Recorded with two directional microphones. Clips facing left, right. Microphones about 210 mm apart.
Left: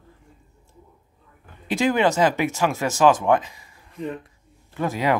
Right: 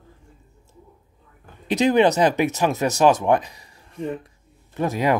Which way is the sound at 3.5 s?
40° right (ahead or behind).